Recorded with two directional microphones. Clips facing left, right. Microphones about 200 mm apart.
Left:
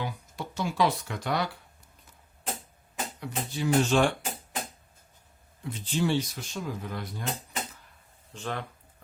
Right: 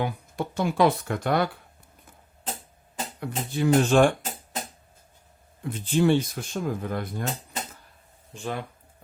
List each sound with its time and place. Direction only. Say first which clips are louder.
0.0 s speech: right 7 dB; 55° right (ahead or behind)
3.2 s speech: right 6 dB; 55° right (ahead or behind)
5.6 s speech: right 6 dB; 50° right (ahead or behind)
8.3 s speech: right 3 dB; 10° right (ahead or behind)